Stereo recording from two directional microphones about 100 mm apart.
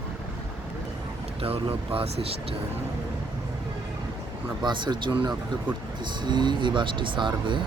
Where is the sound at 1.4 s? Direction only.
70° right (ahead or behind).